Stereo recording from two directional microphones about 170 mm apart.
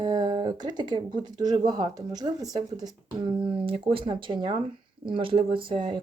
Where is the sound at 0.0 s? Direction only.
25° right (ahead or behind).